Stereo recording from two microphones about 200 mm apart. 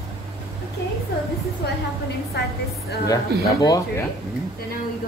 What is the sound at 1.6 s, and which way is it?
Speech, 50° left (ahead or behind).